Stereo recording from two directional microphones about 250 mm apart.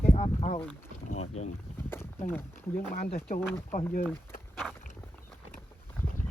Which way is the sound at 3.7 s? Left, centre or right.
Left.